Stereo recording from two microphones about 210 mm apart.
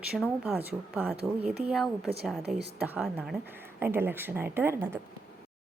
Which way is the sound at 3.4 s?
10° right (ahead or behind).